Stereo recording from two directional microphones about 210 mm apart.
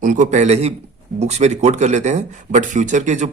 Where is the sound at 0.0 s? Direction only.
40° right (ahead or behind).